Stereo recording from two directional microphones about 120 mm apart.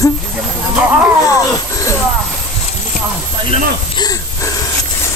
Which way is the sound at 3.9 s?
30° left (ahead or behind).